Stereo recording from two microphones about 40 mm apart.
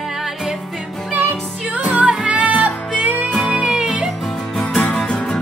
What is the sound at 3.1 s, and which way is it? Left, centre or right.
Music, centre.